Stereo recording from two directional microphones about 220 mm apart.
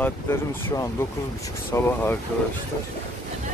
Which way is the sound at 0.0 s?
10° left (ahead or behind).